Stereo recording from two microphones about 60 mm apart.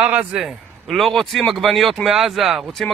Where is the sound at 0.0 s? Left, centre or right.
Centre.